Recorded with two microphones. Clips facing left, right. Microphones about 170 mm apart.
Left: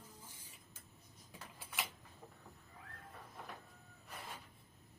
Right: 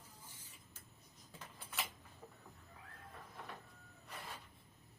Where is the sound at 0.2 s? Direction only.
10° left (ahead or behind).